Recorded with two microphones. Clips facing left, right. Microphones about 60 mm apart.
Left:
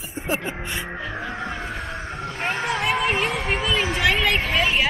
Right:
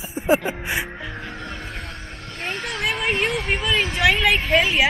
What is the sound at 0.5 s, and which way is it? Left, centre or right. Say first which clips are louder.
Speech: right 4 dB; centre.